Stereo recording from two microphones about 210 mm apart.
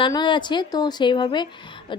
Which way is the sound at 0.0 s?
20° left (ahead or behind).